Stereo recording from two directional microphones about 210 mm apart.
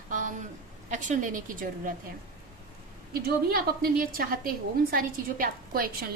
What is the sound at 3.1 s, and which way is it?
A woman's voice, 45° right (ahead or behind).